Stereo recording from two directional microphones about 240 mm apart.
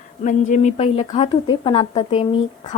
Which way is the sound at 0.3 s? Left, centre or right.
Left.